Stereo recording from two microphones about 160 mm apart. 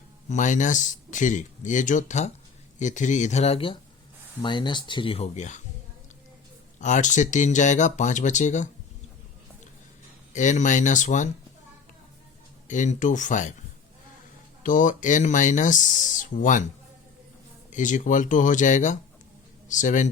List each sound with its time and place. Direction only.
0.3 s speech: 50° left (ahead or behind)
6.7 s speech: 50° left (ahead or behind)
10.3 s speech: 50° left (ahead or behind)
12.6 s speech: 50° left (ahead or behind)
14.6 s speech: 55° left (ahead or behind)
17.7 s a man's voice: 50° left (ahead or behind)